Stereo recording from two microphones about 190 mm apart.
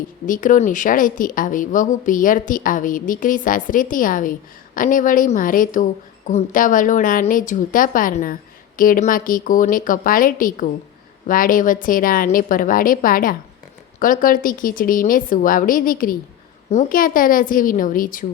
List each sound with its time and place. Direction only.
0.3 s speech: 45° left (ahead or behind)